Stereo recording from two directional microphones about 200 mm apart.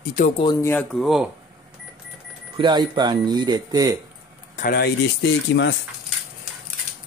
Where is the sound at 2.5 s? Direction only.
25° right (ahead or behind).